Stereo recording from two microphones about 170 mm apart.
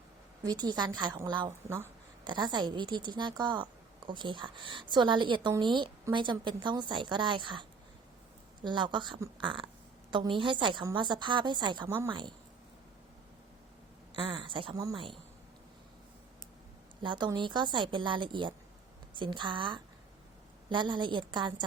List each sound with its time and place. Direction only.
0.4 s a woman's voice: 25° right (ahead or behind)
1.5 s speech: 15° right (ahead or behind)
2.2 s a woman's voice: 25° right (ahead or behind)
11.9 s speech: 15° right (ahead or behind)
14.3 s a woman's voice: 30° right (ahead or behind)
17.0 s a woman's voice: 25° right (ahead or behind)